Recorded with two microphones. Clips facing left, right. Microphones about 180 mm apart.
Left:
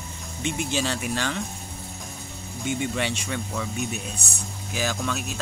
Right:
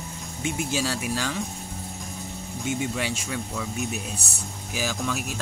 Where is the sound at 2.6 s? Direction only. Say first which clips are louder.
Left 1 dB; 5° right (ahead or behind).